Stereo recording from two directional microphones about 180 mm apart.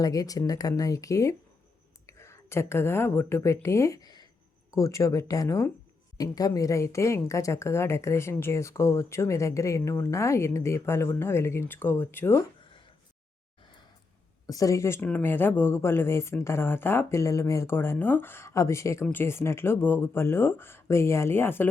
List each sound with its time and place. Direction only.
0.0 s a woman's voice: 20° left (ahead or behind)
14.4 s speech: 20° left (ahead or behind)